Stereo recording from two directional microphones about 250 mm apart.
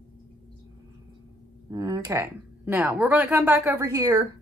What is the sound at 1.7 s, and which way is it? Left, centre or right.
Speech, centre.